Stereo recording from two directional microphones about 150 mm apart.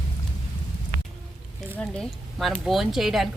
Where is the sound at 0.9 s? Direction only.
75° right (ahead or behind).